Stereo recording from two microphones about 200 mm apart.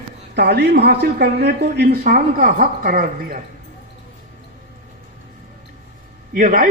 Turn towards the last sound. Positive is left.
turn(degrees=-40)  # may be behind; listen again after turning